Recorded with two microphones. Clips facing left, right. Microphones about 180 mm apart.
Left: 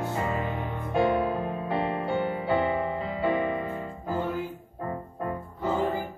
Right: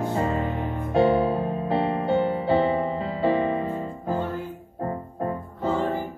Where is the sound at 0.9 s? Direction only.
30° right (ahead or behind).